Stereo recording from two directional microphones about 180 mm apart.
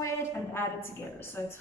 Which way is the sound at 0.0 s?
15° left (ahead or behind).